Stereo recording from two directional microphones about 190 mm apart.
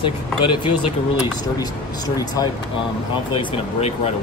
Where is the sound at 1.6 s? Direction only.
20° left (ahead or behind).